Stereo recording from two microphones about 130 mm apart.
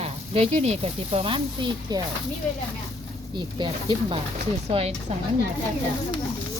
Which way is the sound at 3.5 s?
35° right (ahead or behind).